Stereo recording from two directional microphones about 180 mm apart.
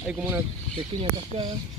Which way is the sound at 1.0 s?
30° right (ahead or behind).